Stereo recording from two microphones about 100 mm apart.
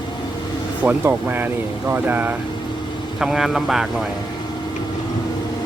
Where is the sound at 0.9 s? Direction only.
20° right (ahead or behind).